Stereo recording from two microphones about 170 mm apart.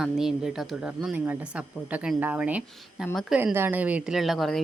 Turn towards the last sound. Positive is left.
turn(degrees=0)  # may be behind; listen again after turning